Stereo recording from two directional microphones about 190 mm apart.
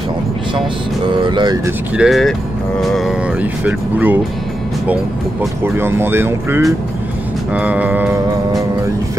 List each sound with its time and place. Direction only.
1.1 s speech: 25° right (ahead or behind)
2.0 s speech: centre (ahead or behind)
5.8 s speech: 10° right (ahead or behind)